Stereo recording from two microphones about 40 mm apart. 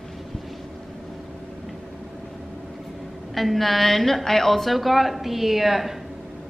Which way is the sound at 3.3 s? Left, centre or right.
Centre.